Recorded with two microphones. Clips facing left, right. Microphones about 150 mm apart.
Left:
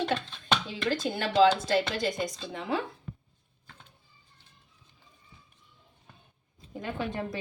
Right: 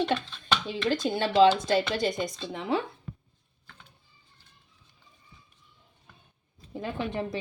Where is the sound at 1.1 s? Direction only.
20° right (ahead or behind).